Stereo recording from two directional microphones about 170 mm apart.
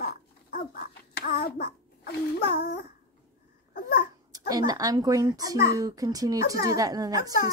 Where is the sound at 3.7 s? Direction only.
60° left (ahead or behind).